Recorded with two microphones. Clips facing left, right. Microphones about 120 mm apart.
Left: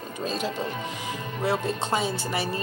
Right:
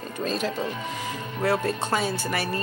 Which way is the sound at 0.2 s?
15° left (ahead or behind).